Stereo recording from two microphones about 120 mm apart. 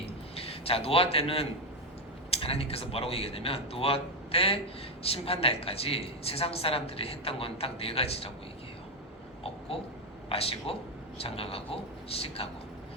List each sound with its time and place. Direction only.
0.0 s a sound: 55° left (ahead or behind)
2.3 s speech: 55° left (ahead or behind)
9.4 s babbling: 50° left (ahead or behind)
10.2 s speech: 55° left (ahead or behind)